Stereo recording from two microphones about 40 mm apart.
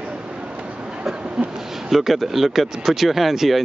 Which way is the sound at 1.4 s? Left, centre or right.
Centre.